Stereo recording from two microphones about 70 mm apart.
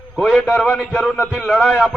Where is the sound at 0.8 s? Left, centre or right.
Centre.